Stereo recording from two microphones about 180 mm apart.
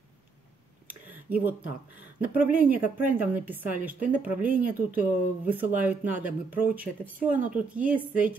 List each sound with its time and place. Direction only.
0.8 s a sound: 10° right (ahead or behind)
2.3 s a woman's voice: 10° right (ahead or behind)
4.4 s speech: 50° right (ahead or behind)
4.6 s a woman's voice: 10° right (ahead or behind)